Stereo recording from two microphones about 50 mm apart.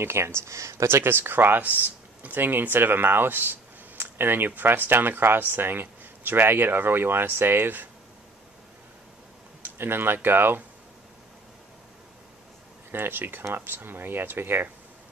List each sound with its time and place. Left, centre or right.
0.0 s speech: right
0.8 s speech: right
1.6 s speech: right
9.8 s speech: right
12.9 s speech: right